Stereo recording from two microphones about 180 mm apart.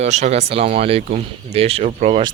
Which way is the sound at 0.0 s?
40° right (ahead or behind).